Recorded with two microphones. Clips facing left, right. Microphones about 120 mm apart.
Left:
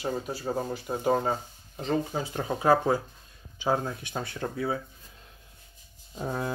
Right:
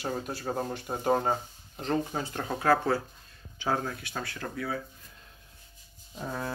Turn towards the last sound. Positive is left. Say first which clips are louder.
# left 3 dB
turn(degrees=20)  # may be behind; listen again after turning